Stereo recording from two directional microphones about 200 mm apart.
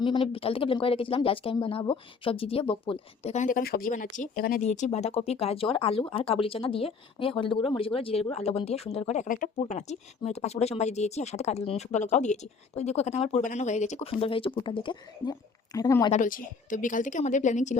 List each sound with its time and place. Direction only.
0.0 s speech: 25° left (ahead or behind)
16.1 s speech: 40° left (ahead or behind)